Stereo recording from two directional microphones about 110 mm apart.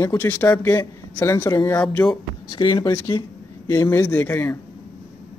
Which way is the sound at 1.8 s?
15° left (ahead or behind).